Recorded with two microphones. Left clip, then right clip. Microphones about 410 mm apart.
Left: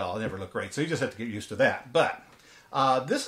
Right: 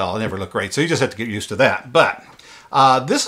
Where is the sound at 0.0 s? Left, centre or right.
Right.